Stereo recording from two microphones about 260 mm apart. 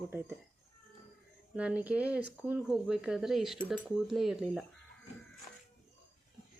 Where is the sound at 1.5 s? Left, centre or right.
Centre.